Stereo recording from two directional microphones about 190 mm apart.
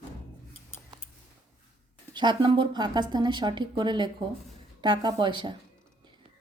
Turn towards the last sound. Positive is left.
turn(degrees=-25)  # may be behind; listen again after turning